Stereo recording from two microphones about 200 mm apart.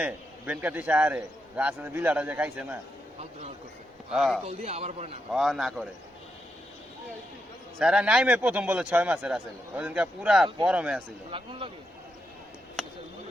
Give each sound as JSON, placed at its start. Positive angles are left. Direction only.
{"t": 0.0, "sound": "a man's voice", "side_deg": -5}
{"t": 4.1, "sound": "a man's voice", "side_deg": 0}
{"t": 4.4, "sound": "a man's voice", "side_deg": -30}
{"t": 5.3, "sound": "a man's voice", "side_deg": 0}
{"t": 7.8, "sound": "a man's voice", "side_deg": -5}
{"t": 11.3, "sound": "speech", "side_deg": -25}
{"t": 12.8, "sound": "a sound", "side_deg": 0}